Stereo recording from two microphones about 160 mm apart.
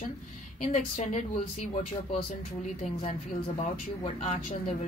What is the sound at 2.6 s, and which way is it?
Speech, 45° left (ahead or behind).